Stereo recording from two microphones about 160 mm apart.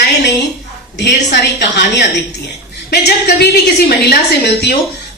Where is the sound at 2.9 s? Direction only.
90° left.